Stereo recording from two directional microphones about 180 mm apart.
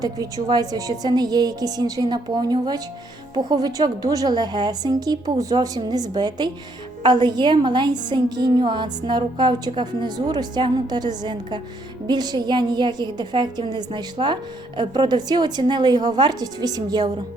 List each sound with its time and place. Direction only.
0.0 s a woman's voice: 20° right (ahead or behind)